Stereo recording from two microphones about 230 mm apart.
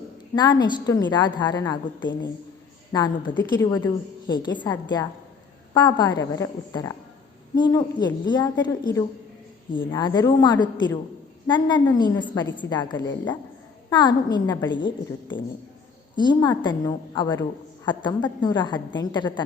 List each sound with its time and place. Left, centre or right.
0.3 s a woman's voice: centre
16.1 s a woman's voice: centre